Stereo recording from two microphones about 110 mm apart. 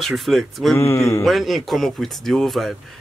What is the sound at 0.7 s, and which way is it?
Speech, 25° left (ahead or behind).